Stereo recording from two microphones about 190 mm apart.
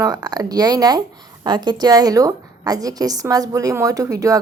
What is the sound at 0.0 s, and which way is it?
A woman's voice, 20° right (ahead or behind).